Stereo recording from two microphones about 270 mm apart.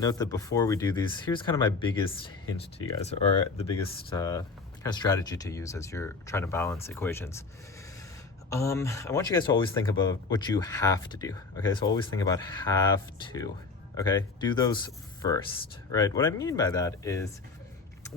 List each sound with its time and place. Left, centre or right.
0.0 s speech: centre
8.4 s speech: centre
13.9 s speech: centre
15.9 s speech: centre